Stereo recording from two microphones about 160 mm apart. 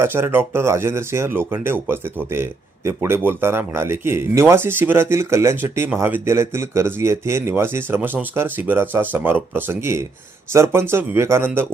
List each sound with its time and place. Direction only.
0.0 s speech: 15° right (ahead or behind)